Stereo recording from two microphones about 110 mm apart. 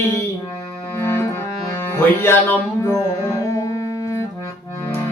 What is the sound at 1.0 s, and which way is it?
Accordion, 25° left (ahead or behind).